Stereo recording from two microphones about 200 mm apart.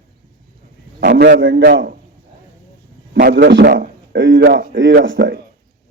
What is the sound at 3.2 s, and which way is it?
A man's voice, 55° right (ahead or behind).